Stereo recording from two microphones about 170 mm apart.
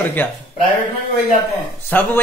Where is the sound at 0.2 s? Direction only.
10° left (ahead or behind).